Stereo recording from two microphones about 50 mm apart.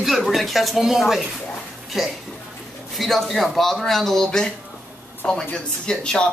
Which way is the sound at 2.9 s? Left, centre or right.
Centre.